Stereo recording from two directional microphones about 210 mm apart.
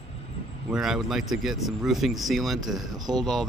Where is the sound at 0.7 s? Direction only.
Centre (ahead or behind).